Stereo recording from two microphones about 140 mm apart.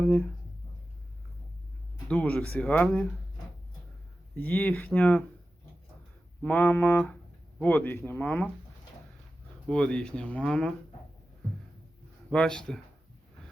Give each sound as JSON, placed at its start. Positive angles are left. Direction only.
{"t": 2.0, "sound": "speech", "side_deg": 10}
{"t": 4.4, "sound": "speech", "side_deg": 10}
{"t": 6.4, "sound": "speech", "side_deg": 10}
{"t": 9.6, "sound": "speech", "side_deg": 5}
{"t": 12.3, "sound": "speech", "side_deg": 5}